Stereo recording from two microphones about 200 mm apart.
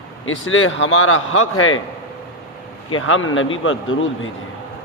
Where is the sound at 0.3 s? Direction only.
85° left.